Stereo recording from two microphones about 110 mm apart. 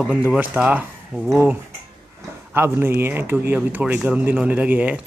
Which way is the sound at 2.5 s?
20° right (ahead or behind).